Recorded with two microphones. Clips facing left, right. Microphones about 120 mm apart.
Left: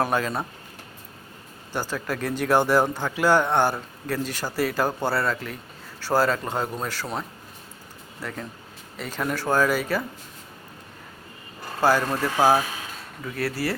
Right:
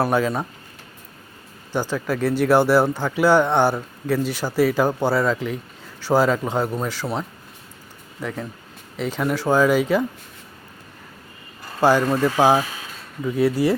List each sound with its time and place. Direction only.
0.0 s speech: 10° right (ahead or behind)
1.7 s speech: 15° right (ahead or behind)
8.2 s speech: centre (ahead or behind)
9.3 s speech: 15° right (ahead or behind)
11.8 s speech: 15° right (ahead or behind)